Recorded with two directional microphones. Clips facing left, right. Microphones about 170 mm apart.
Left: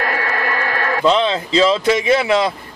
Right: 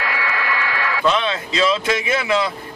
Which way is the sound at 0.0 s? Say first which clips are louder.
Left 4 dB; 45° left (ahead or behind).